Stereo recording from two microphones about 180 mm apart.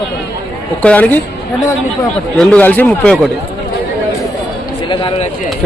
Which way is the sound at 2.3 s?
10° left (ahead or behind).